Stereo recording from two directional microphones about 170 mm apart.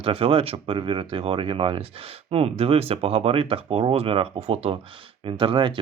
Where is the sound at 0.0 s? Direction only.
35° right (ahead or behind).